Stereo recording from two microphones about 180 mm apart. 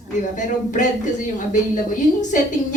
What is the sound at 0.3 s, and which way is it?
Speech, 45° left (ahead or behind).